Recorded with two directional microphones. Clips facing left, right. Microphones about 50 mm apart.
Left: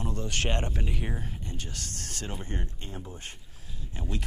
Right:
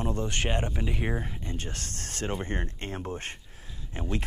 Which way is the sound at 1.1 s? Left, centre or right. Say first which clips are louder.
Right 4 dB; right.